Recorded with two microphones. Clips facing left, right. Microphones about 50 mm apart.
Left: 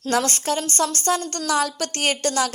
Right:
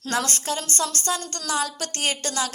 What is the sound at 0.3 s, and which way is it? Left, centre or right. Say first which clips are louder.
A woman's voice: left 4 dB; left.